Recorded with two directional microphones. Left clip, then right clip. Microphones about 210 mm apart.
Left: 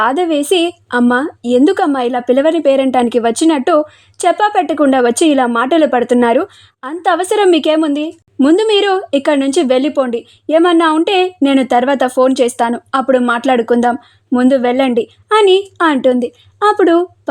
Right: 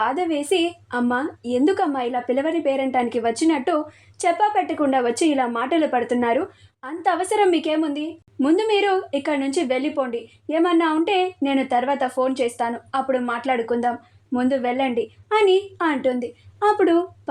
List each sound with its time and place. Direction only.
0.0 s a woman's voice: 50° left (ahead or behind)